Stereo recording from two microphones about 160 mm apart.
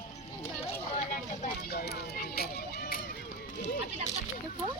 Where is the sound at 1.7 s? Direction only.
80° left.